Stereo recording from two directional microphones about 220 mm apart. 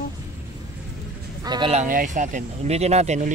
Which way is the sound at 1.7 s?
35° right (ahead or behind).